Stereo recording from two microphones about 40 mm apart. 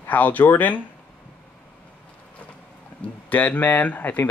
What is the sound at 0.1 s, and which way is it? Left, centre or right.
Speech, left.